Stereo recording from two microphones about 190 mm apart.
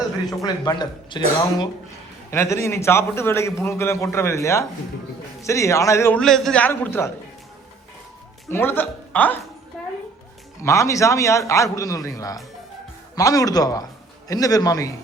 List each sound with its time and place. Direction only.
0.3 s a man's voice: 20° left (ahead or behind)
2.3 s a man's voice: 15° left (ahead or behind)
8.4 s a man's voice: 10° left (ahead or behind)
10.6 s a man's voice: 15° left (ahead or behind)